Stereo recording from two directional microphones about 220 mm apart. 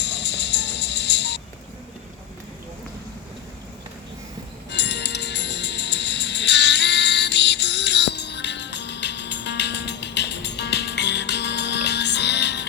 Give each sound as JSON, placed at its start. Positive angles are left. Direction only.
{"t": 0.0, "sound": "music", "side_deg": 50}
{"t": 4.7, "sound": "music", "side_deg": 50}